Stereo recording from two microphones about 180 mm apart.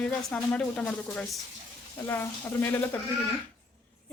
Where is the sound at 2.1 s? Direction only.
15° left (ahead or behind).